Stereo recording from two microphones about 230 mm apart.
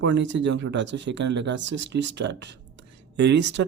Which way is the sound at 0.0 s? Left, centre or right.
Right.